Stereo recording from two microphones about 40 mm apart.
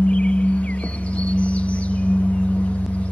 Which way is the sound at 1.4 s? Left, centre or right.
Left.